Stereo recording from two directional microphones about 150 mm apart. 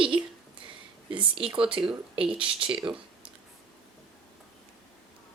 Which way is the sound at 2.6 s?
35° right (ahead or behind).